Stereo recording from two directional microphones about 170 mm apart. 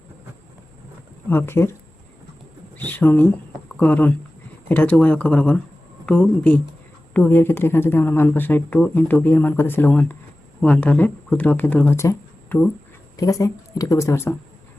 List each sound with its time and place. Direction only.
1.3 s speech: 15° left (ahead or behind)
2.7 s a woman's voice: 10° left (ahead or behind)